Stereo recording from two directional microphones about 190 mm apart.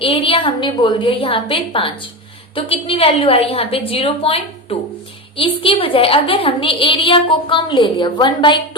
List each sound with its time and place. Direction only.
0.0 s a woman's voice: 30° left (ahead or behind)